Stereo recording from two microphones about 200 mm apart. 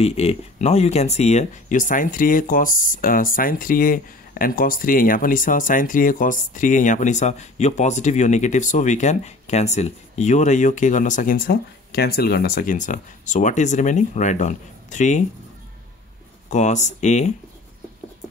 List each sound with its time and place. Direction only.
0.0 s speech: 30° left (ahead or behind)
16.4 s speech: 35° left (ahead or behind)